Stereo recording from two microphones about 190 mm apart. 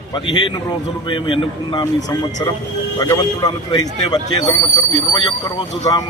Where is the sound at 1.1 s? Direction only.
25° left (ahead or behind).